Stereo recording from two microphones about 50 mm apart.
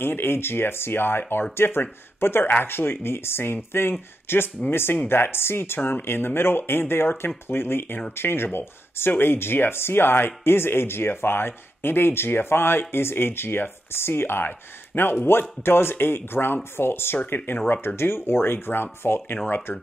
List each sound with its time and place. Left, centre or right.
0.0 s speech: left
17.6 s speech: left
17.8 s speech: left